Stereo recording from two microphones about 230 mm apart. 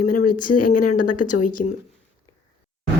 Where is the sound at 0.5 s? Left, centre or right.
Left.